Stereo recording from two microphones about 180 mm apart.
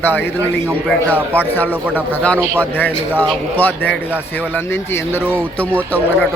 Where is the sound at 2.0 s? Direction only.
5° left (ahead or behind).